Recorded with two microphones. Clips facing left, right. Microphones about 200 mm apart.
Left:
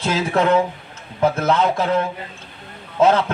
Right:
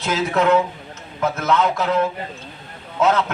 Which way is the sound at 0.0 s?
30° left (ahead or behind).